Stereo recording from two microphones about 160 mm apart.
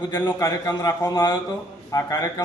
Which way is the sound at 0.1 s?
15° left (ahead or behind).